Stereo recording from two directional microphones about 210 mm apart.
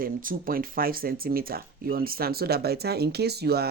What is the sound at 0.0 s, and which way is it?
Speech, 45° right (ahead or behind).